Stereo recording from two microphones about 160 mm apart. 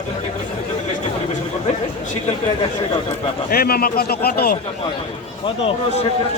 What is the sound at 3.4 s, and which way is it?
Speech, 70° left (ahead or behind).